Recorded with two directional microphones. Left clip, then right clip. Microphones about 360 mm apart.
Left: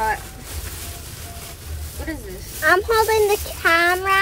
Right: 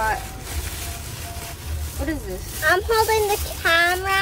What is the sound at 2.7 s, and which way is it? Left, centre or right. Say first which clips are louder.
Speech: left 2 dB; centre.